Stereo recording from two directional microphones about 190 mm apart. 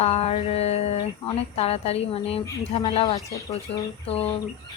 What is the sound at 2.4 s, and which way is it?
Speech, 20° left (ahead or behind).